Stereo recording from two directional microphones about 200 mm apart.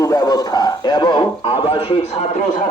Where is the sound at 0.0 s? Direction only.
20° left (ahead or behind).